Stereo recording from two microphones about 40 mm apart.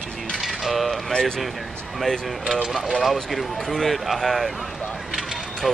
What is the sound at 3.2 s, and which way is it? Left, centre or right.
Speech, centre.